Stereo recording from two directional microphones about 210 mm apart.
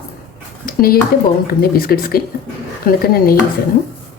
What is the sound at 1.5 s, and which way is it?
Speech, 45° left (ahead or behind).